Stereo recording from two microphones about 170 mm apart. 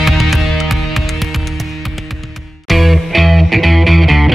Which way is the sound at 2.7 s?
Centre (ahead or behind).